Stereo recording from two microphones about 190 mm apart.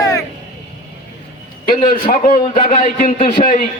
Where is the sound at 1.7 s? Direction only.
45° left (ahead or behind).